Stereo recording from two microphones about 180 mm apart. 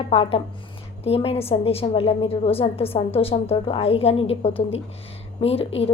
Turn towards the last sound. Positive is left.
turn(degrees=35)  # may be behind; listen again after turning